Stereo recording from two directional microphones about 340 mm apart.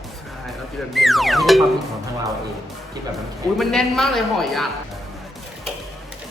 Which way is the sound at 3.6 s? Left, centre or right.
Centre.